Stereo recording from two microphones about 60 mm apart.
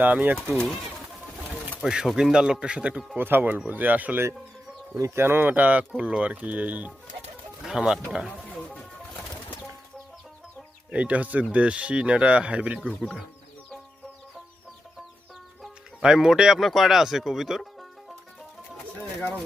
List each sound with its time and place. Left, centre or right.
0.0 s speech: right
1.8 s speech: centre
3.2 s speech: right
4.9 s speech: right
5.2 s speech: right
5.5 s speech: right
7.6 s speech: centre
10.9 s speech: right
16.0 s speech: centre
18.9 s speech: left